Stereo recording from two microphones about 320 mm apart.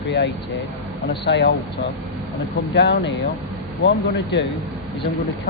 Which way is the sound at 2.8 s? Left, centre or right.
Left.